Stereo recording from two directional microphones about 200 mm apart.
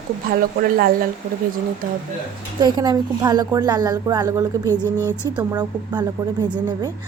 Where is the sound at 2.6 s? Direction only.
20° right (ahead or behind).